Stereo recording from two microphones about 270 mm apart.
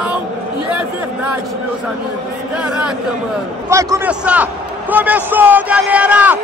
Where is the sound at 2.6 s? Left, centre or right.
Centre.